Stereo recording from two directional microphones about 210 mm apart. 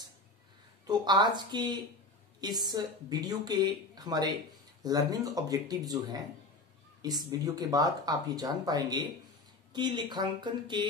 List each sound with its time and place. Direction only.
0.8 s speech: 20° right (ahead or behind)